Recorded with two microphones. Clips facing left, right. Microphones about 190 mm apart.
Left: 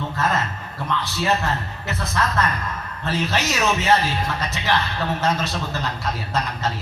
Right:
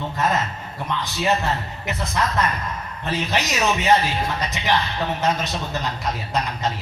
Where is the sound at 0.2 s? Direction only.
15° right (ahead or behind).